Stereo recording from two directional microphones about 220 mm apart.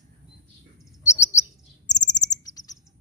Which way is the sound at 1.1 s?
15° left (ahead or behind).